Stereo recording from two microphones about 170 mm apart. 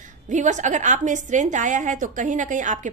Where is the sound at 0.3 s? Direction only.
45° right (ahead or behind).